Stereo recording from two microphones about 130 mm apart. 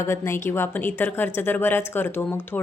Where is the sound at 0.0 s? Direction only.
20° left (ahead or behind).